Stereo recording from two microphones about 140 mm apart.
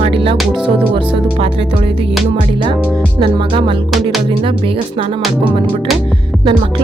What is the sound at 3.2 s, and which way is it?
Speech, 35° right (ahead or behind).